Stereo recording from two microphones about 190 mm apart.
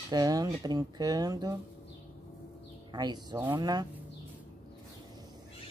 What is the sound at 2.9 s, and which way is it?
Speech, 20° right (ahead or behind).